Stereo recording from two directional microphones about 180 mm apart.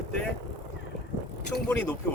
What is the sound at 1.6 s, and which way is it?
Speech, 10° left (ahead or behind).